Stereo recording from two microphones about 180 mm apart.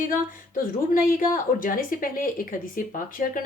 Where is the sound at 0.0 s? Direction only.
50° left (ahead or behind).